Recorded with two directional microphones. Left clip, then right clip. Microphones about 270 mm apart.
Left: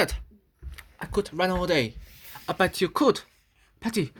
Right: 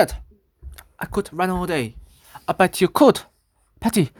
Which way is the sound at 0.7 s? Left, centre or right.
Right.